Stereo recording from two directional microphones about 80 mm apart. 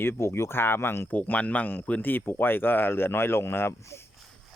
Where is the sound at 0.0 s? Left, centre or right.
Left.